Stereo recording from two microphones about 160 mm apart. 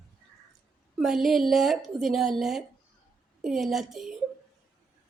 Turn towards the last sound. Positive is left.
turn(degrees=0)  # may be behind; listen again after turning